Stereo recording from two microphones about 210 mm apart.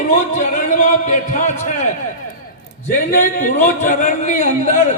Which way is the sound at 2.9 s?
40° left (ahead or behind).